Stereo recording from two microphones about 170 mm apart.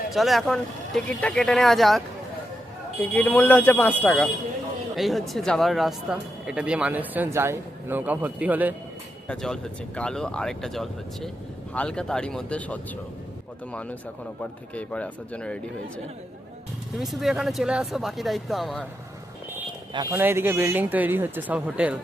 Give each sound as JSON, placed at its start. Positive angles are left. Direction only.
{"t": 0.1, "sound": "speech", "side_deg": 0}
{"t": 3.0, "sound": "speech", "side_deg": 10}
{"t": 9.2, "sound": "speech", "side_deg": 5}
{"t": 14.8, "sound": "speech", "side_deg": 5}
{"t": 17.0, "sound": "speech", "side_deg": 0}
{"t": 19.9, "sound": "speech", "side_deg": -25}
{"t": 20.1, "sound": "speech", "side_deg": -10}